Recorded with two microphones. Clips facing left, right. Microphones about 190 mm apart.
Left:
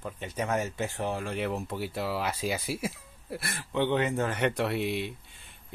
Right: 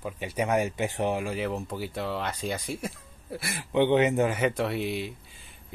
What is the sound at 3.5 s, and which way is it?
Speech, 15° right (ahead or behind).